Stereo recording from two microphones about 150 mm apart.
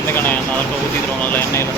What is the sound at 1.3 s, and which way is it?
Speech, 20° left (ahead or behind).